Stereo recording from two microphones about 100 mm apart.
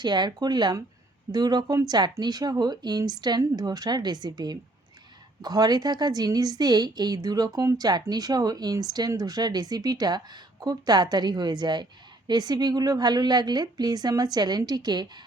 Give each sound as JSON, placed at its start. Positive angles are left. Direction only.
{"t": 0.0, "sound": "a woman's voice", "side_deg": -45}